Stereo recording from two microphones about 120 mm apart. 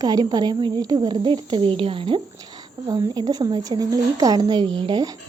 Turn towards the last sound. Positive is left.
turn(degrees=-40)  # may be behind; listen again after turning